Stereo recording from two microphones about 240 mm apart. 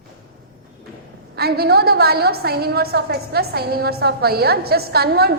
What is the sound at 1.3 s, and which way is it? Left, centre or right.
A woman's voice, right.